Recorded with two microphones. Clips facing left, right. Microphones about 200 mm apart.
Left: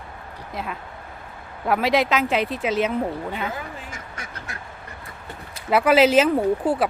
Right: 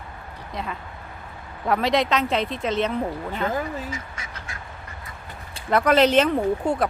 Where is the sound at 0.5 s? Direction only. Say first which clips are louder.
Even; 5° left (ahead or behind).